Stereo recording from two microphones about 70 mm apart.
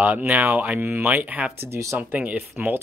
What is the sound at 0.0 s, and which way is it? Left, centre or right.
Speech, right.